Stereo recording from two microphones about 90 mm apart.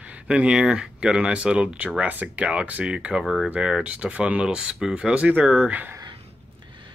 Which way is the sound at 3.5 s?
10° right (ahead or behind).